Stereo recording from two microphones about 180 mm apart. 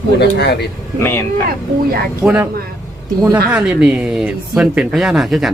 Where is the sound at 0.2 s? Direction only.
65° left (ahead or behind).